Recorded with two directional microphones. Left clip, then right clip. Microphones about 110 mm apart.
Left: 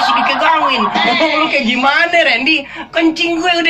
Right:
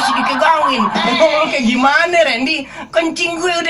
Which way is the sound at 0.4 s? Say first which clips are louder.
Left 1 dB; 45° right (ahead or behind).